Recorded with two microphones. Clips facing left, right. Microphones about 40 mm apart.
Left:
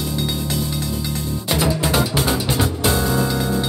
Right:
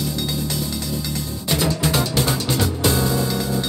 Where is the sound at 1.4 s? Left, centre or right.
Centre.